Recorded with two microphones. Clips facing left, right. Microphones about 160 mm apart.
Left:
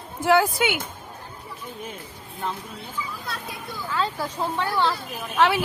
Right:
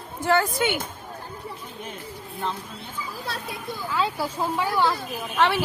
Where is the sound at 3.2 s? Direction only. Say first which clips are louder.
Right 2 dB; 30° right (ahead or behind).